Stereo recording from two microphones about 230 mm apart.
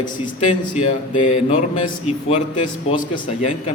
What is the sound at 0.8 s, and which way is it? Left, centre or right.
A man's voice, left.